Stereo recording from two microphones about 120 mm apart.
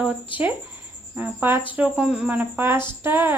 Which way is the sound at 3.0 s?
20° right (ahead or behind).